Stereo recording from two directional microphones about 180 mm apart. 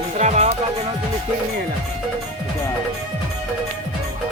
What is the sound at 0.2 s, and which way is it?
Music, 40° right (ahead or behind).